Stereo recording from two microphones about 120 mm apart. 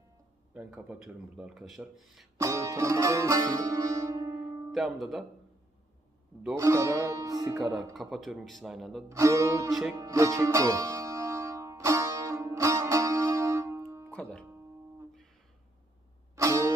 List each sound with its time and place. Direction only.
0.5 s speech: 10° right (ahead or behind)
2.3 s music: 25° right (ahead or behind)
4.4 s music: 5° right (ahead or behind)
6.5 s music: 25° right (ahead or behind)
7.9 s speech: centre (ahead or behind)
9.1 s music: 25° right (ahead or behind)
9.7 s speech: centre (ahead or behind)
9.9 s music: 25° right (ahead or behind)
14.1 s music: 10° left (ahead or behind)
16.3 s music: 25° right (ahead or behind)